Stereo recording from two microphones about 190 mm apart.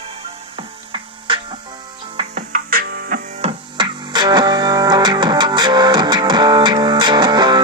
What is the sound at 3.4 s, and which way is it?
Music, 25° right (ahead or behind).